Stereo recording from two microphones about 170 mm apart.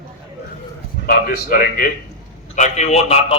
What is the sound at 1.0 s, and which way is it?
Speech, 60° left (ahead or behind).